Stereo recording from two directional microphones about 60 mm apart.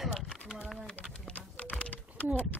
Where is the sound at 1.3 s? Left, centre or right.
Left.